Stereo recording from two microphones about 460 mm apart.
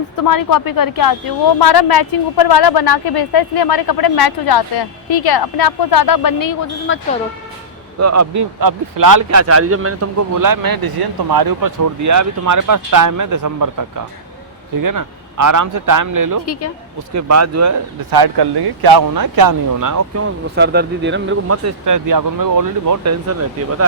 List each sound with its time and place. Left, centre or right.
0.2 s a woman's voice: left
6.9 s speech: left
7.9 s speech: right
10.3 s speech: right
16.5 s speech: left
17.2 s speech: right
18.1 s speech: right
20.2 s speech: right